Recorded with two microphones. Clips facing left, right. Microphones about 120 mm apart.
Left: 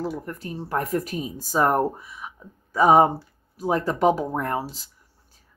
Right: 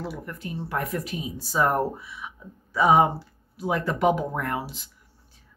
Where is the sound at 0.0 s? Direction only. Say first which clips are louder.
Left 4 dB; 40° left (ahead or behind).